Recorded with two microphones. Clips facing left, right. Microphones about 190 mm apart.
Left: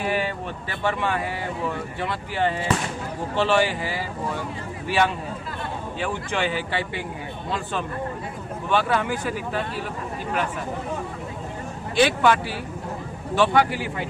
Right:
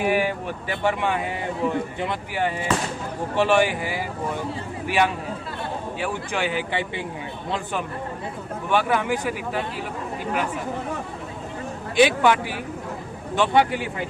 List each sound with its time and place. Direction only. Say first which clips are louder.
0.0 s speech: right 3 dB; 15° right (ahead or behind)
11.9 s speech: right 1 dB; 15° right (ahead or behind)